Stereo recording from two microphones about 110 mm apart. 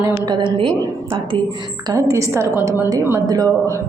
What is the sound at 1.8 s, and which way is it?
A woman's voice, 30° right (ahead or behind).